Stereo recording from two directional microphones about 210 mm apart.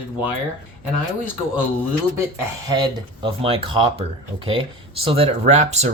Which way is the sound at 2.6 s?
20° right (ahead or behind).